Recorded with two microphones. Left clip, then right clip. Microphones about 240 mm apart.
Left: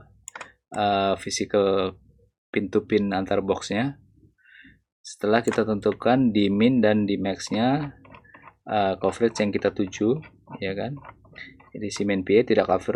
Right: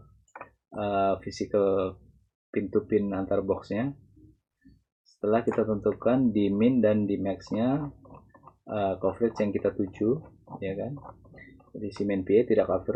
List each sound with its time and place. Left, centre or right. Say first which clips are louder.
0.9 s speech: left 3 dB; centre
5.2 s speech: left 4 dB; centre